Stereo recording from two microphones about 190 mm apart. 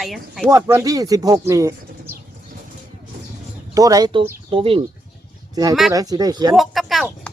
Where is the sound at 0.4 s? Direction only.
15° right (ahead or behind).